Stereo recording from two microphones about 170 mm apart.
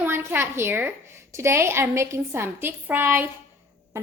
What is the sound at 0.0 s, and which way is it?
A woman's voice, 10° right (ahead or behind).